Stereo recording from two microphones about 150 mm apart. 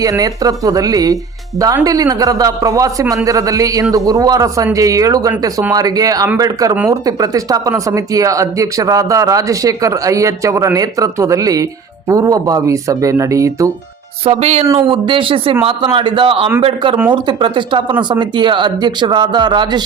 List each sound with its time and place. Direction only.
0.0 s speech: 25° right (ahead or behind)
14.3 s speech: 45° right (ahead or behind)